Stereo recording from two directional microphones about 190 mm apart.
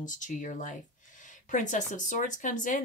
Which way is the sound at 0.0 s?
40° left (ahead or behind).